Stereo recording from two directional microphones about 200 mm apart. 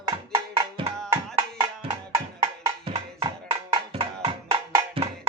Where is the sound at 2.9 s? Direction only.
25° right (ahead or behind).